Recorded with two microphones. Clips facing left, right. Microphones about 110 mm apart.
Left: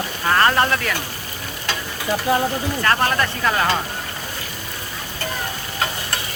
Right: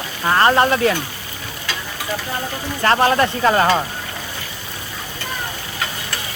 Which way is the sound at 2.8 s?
25° right (ahead or behind).